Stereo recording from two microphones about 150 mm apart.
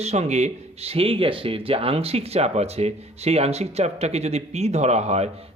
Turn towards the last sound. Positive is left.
turn(degrees=-45)  # may be behind; listen again after turning